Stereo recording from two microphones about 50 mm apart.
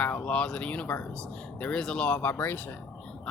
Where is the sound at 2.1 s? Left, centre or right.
Left.